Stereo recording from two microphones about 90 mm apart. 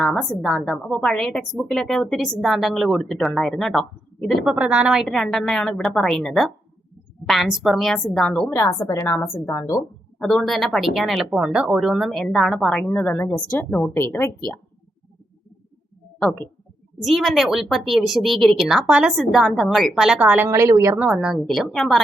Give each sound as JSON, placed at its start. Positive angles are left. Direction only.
{"t": 0.0, "sound": "a woman's voice", "side_deg": 5}
{"t": 4.5, "sound": "speech", "side_deg": -15}
{"t": 5.0, "sound": "a woman's voice", "side_deg": 5}
{"t": 8.5, "sound": "a woman's voice", "side_deg": 35}
{"t": 9.0, "sound": "a woman's voice", "side_deg": 25}
{"t": 9.5, "sound": "a woman's voice", "side_deg": 35}
{"t": 10.2, "sound": "a woman's voice", "side_deg": 10}
{"t": 12.9, "sound": "a woman's voice", "side_deg": 20}
{"t": 17.0, "sound": "a woman's voice", "side_deg": 0}
{"t": 20.5, "sound": "a woman's voice", "side_deg": -35}
{"t": 21.0, "sound": "a woman's voice", "side_deg": -10}